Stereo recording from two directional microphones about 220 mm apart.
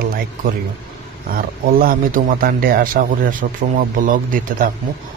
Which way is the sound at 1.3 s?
40° right (ahead or behind).